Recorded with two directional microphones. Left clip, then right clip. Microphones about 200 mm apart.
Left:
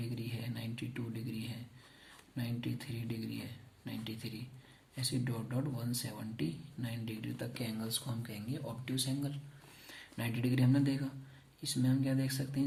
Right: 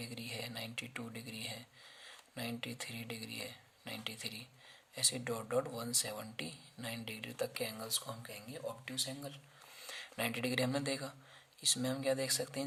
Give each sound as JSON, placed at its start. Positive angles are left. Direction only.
{"t": 0.1, "sound": "a sound", "side_deg": -50}
{"t": 2.3, "sound": "speech", "side_deg": -50}
{"t": 9.8, "sound": "speech", "side_deg": -50}